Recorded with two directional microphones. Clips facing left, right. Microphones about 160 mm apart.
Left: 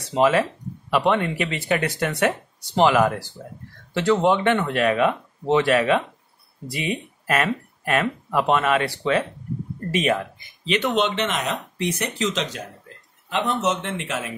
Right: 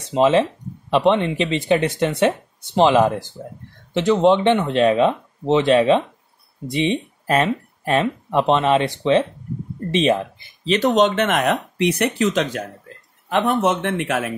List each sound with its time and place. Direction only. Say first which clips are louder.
0.0 s speech: right 3 dB; 25° right (ahead or behind); by 11.1 s 40° right (ahead or behind)
11.1 s speech: right 6 dB; 55° right (ahead or behind)